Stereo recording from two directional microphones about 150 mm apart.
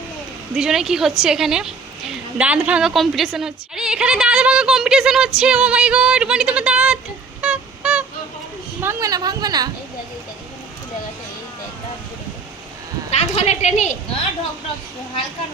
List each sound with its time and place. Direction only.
0.5 s a woman's voice: 5° right (ahead or behind)
7.4 s a sound: 10° right (ahead or behind)
8.8 s a woman's voice: 20° right (ahead or behind)
13.1 s a woman's voice: 45° left (ahead or behind)